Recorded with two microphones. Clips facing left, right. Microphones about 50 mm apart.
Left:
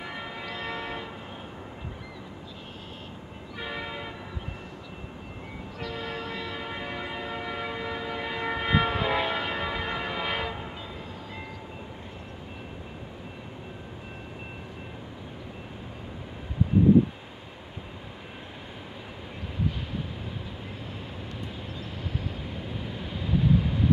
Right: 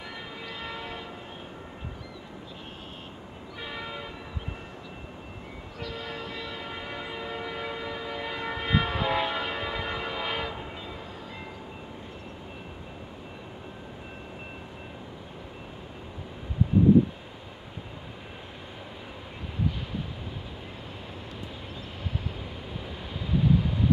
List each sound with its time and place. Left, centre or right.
0.0 s church bell: centre
0.5 s train: centre
3.5 s train: centre
5.8 s train: centre
22.8 s vehicle: centre